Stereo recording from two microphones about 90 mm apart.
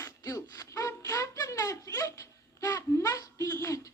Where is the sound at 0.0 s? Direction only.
35° left (ahead or behind).